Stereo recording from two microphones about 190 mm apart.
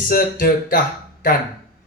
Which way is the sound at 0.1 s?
50° left (ahead or behind).